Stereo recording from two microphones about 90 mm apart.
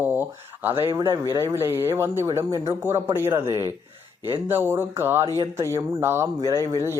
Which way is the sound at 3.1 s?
25° right (ahead or behind).